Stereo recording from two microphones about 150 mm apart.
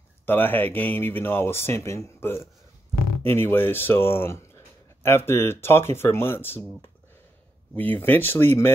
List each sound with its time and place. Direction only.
0.3 s speech: 15° left (ahead or behind)
7.7 s speech: 10° left (ahead or behind)